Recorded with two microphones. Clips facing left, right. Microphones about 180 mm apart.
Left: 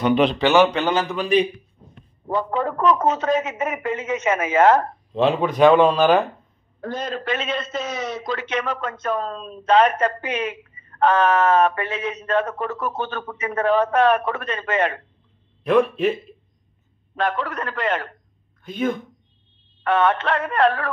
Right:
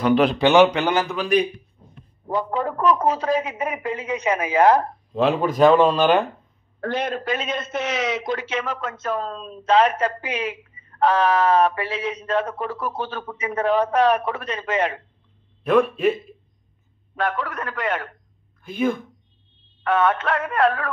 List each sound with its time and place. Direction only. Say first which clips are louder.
0.0 s synthetic singing: even; centre (ahead or behind)
0.4 s a woman's voice: right 1 dB; 15° right (ahead or behind)
5.1 s synthetic singing: left 1 dB; centre (ahead or behind)
6.8 s a man's voice: right 3 dB; 70° right (ahead or behind)
7.2 s a woman's voice: even; 10° right (ahead or behind)
7.5 s a man's voice: even; 50° right (ahead or behind)
7.8 s a man's voice: right 3 dB; 85° right
8.4 s a woman's voice: left 2 dB; 5° right (ahead or behind)
15.6 s synthetic singing: left 1 dB; centre (ahead or behind)
17.1 s synthetic singing: left 1 dB; centre (ahead or behind)
18.6 s speech: right 1 dB; 5° right (ahead or behind)
19.8 s synthetic singing: left 1 dB; centre (ahead or behind)